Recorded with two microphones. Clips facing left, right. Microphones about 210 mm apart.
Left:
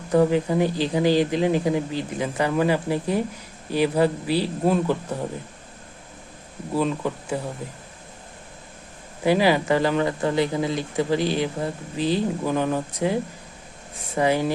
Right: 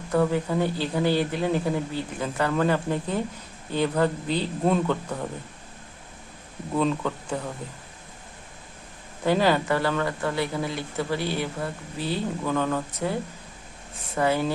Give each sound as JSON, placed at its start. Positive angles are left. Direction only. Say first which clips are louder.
{"t": 0.3, "sound": "speech", "louder": "left 4 dB", "side_deg": 15}
{"t": 6.7, "sound": "speech", "louder": "left 1 dB", "side_deg": 5}
{"t": 9.2, "sound": "speech", "louder": "left 3 dB", "side_deg": 10}
{"t": 14.2, "sound": "speech", "louder": "left 2 dB", "side_deg": 15}